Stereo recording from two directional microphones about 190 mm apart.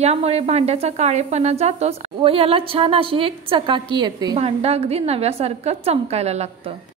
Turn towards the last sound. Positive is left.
turn(degrees=-35)  # may be behind; listen again after turning